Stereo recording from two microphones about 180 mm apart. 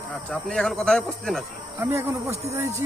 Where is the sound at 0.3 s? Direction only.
Centre (ahead or behind).